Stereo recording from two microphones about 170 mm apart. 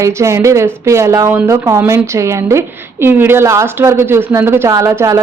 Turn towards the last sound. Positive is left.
turn(degrees=-15)  # may be behind; listen again after turning